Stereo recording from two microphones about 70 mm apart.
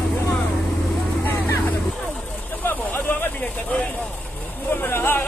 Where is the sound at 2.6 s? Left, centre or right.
Left.